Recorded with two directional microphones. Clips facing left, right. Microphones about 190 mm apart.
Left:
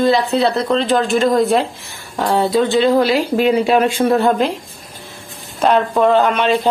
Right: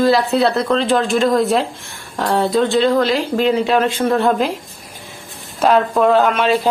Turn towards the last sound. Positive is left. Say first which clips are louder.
# even
turn(degrees=0)  # may be behind; listen again after turning